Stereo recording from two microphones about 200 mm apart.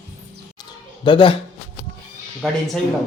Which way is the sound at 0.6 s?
25° left (ahead or behind).